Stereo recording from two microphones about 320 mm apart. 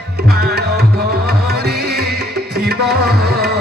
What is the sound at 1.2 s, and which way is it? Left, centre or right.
Music, right.